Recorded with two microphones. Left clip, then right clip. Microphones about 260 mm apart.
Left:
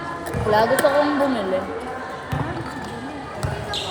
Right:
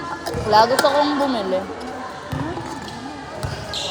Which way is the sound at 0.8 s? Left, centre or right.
Right.